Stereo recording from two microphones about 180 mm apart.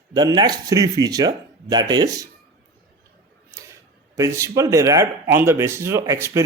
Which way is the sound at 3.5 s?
15° right (ahead or behind).